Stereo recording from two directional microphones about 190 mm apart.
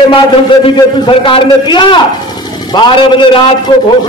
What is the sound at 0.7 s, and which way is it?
A man's voice, 25° left (ahead or behind).